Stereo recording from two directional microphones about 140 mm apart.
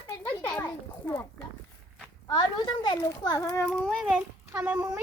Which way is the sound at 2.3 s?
35° left (ahead or behind).